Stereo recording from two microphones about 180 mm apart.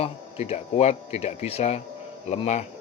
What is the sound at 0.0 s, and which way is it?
A man's voice, 35° left (ahead or behind).